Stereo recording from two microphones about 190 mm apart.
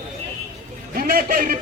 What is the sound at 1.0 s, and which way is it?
Speech, 50° right (ahead or behind).